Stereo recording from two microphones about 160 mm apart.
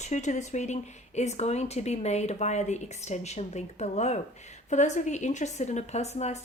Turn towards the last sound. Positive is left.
turn(degrees=45)  # may be behind; listen again after turning